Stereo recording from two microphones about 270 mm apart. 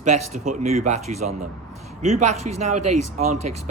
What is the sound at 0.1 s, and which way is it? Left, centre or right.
Speech, right.